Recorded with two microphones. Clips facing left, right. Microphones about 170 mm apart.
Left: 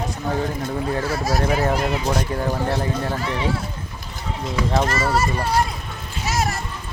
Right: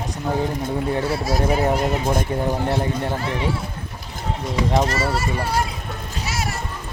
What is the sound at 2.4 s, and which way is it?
Speech, 20° right (ahead or behind).